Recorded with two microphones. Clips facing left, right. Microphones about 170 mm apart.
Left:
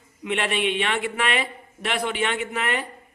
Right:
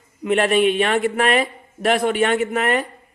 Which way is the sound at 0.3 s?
45° right (ahead or behind).